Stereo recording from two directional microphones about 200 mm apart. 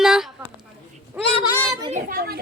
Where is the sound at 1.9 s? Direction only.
40° right (ahead or behind).